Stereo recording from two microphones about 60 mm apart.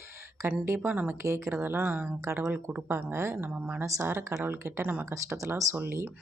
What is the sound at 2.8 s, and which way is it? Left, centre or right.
Speech, right.